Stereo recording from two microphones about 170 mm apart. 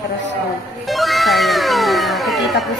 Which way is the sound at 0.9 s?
Centre (ahead or behind).